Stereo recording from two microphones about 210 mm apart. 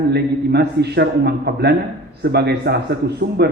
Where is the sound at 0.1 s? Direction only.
50° right (ahead or behind).